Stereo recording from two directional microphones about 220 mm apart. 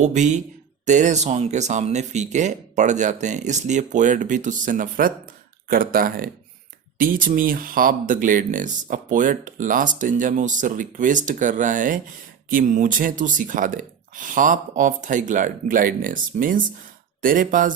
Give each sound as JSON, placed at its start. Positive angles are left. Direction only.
{"t": 0.0, "sound": "speech", "side_deg": -35}